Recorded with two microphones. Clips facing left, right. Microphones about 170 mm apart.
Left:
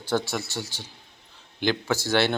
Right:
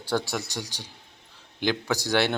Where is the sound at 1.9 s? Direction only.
15° right (ahead or behind).